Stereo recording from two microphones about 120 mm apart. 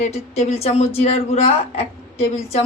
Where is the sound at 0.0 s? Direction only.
65° left (ahead or behind).